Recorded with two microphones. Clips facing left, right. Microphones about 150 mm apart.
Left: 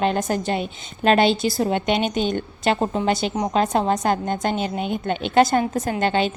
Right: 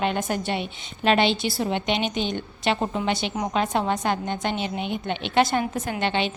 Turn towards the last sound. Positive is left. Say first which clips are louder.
# left 4 dB
turn(degrees=40)  # may be behind; listen again after turning